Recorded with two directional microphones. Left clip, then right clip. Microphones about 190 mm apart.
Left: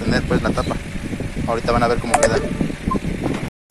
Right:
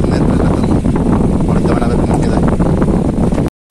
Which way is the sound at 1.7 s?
5° right (ahead or behind).